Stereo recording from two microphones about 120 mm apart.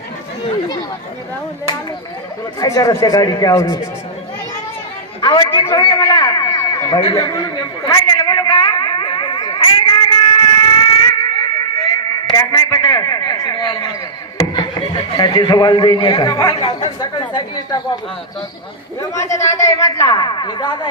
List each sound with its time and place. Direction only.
2.6 s speech: 30° left (ahead or behind)
5.2 s speech: 40° left (ahead or behind)
5.8 s a sound: 40° left (ahead or behind)
14.4 s a man's voice: 35° left (ahead or behind)
18.9 s speech: 25° left (ahead or behind)
20.1 s speech: 40° left (ahead or behind)